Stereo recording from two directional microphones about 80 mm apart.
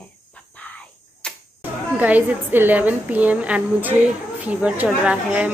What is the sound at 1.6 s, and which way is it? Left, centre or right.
A woman's voice, centre.